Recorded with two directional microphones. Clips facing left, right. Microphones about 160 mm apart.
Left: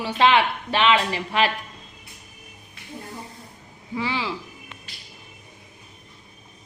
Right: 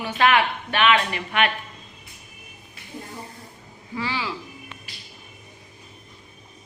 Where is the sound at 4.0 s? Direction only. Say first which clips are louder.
Left 2 dB; 25° left (ahead or behind).